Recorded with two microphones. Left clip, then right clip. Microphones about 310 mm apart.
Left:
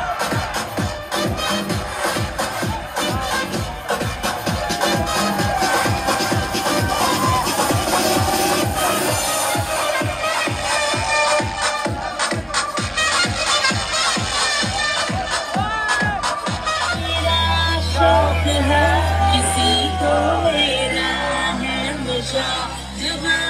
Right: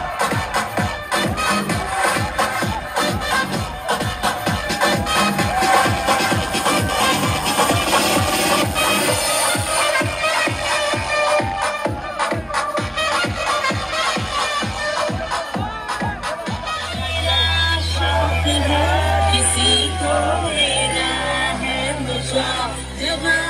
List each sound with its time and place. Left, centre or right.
4.8 s music: right
17.5 s music: left